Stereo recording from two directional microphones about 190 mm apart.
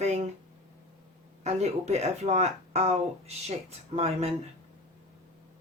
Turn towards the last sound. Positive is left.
turn(degrees=-35)  # may be behind; listen again after turning